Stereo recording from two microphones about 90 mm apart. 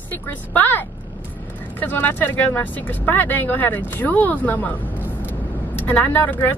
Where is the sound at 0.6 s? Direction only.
20° left (ahead or behind).